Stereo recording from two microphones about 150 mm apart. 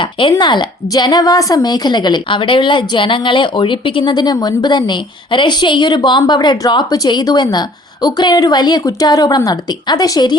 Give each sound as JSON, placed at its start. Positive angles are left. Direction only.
{"t": 0.0, "sound": "a woman's voice", "side_deg": 35}